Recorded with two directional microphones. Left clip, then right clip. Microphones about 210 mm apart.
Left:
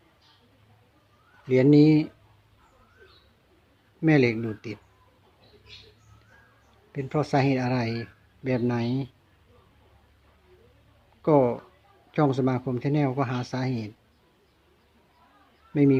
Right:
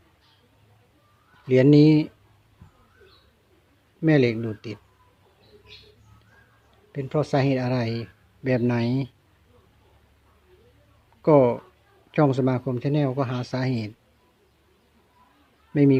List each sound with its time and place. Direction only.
1.5 s speech: 15° right (ahead or behind)
4.0 s speech: 5° right (ahead or behind)
6.9 s speech: 10° right (ahead or behind)
11.2 s speech: 20° right (ahead or behind)
15.7 s speech: 15° right (ahead or behind)